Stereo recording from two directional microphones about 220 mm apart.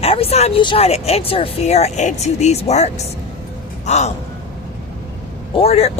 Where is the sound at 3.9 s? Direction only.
30° left (ahead or behind).